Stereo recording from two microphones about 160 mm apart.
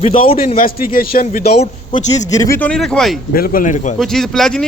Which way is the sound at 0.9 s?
65° left (ahead or behind).